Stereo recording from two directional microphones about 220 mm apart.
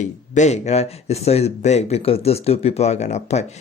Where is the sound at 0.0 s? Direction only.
30° left (ahead or behind).